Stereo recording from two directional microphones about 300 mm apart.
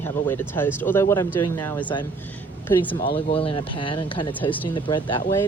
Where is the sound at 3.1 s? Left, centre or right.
Centre.